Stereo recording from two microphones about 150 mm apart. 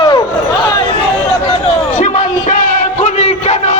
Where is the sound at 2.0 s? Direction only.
55° left (ahead or behind).